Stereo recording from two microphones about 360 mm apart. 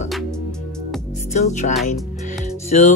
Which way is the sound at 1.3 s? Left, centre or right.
Centre.